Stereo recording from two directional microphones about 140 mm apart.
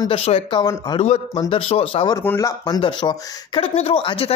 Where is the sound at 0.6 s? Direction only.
25° left (ahead or behind).